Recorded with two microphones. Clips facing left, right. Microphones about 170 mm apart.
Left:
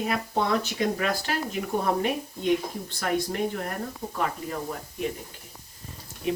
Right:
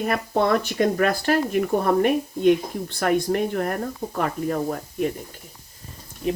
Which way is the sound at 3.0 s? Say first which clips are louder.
Right 6 dB; 55° right (ahead or behind).